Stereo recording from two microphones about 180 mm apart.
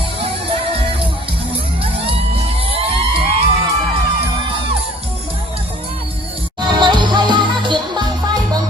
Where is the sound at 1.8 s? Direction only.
30° right (ahead or behind).